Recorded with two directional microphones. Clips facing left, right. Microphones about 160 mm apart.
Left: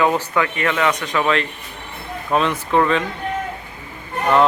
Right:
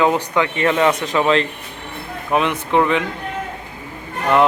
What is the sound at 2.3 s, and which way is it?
Speech, 15° right (ahead or behind).